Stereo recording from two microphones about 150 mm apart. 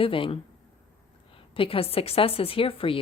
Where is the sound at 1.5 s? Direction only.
40° left (ahead or behind).